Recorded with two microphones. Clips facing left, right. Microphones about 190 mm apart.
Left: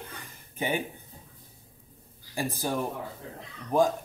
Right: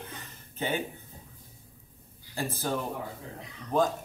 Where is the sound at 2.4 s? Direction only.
15° left (ahead or behind).